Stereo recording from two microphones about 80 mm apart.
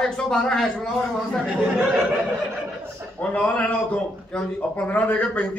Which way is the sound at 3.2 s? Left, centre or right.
Centre.